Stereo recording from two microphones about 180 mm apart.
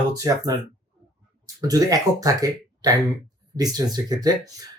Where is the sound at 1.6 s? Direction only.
20° right (ahead or behind).